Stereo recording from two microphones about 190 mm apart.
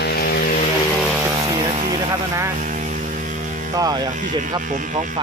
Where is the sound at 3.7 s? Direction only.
20° right (ahead or behind).